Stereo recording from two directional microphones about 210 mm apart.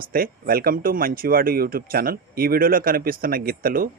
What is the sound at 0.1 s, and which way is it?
Speech, 45° right (ahead or behind).